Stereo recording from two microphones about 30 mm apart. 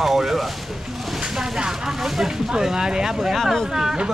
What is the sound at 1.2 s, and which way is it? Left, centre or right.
Speech, right.